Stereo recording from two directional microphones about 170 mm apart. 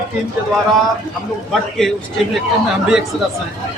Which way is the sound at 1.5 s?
Centre (ahead or behind).